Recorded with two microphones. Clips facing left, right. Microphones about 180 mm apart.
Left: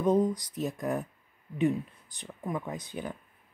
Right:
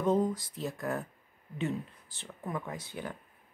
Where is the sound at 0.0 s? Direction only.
15° left (ahead or behind).